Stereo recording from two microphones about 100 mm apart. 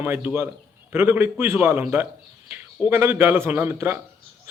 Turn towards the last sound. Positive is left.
turn(degrees=-20)  # may be behind; listen again after turning